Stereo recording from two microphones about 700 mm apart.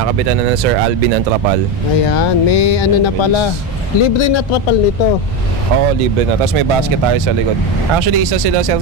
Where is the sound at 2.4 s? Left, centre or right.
Left.